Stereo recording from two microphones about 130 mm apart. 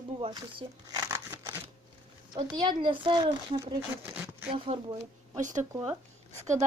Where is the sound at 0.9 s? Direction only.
20° right (ahead or behind).